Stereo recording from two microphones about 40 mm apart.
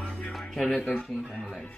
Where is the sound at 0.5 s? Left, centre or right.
Centre.